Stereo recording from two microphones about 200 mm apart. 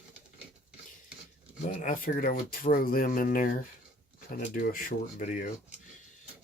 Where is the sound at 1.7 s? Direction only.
40° left (ahead or behind).